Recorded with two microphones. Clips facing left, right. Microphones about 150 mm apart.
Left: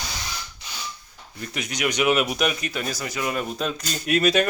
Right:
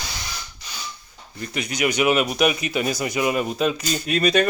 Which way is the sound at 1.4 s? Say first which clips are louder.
Right 4 dB; centre (ahead or behind).